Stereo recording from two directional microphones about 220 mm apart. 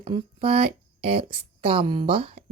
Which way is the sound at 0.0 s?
25° right (ahead or behind).